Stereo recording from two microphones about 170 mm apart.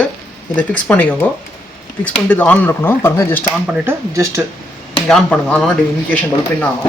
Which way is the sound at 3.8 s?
15° right (ahead or behind).